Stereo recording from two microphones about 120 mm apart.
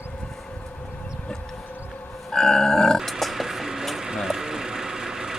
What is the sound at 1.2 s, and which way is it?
Civil defense siren, 10° left (ahead or behind).